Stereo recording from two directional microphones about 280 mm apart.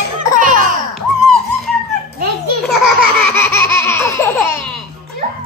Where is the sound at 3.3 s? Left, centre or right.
Centre.